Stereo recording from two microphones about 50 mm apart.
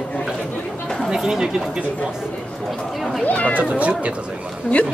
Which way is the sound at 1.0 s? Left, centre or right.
Centre.